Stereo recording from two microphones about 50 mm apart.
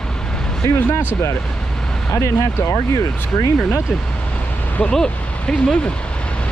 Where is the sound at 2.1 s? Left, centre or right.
Left.